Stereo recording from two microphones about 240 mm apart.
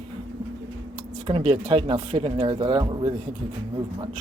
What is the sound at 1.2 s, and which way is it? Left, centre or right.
Speech, right.